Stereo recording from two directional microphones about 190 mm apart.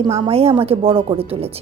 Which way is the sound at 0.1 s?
30° right (ahead or behind).